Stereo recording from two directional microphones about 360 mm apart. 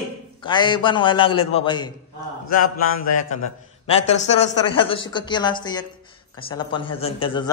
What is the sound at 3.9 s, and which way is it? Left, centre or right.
A man's voice, centre.